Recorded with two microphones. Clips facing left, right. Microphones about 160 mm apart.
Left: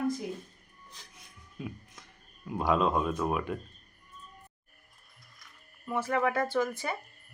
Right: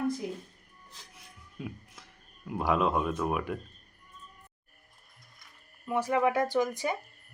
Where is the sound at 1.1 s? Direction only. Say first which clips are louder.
Right 1 dB; 5° right (ahead or behind).